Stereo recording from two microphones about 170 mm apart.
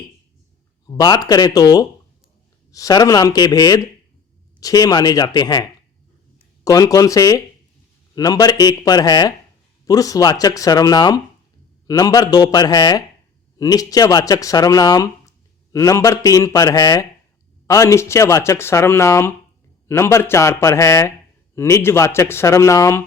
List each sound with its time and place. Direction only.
0.9 s speech: 25° left (ahead or behind)
6.7 s speech: 20° left (ahead or behind)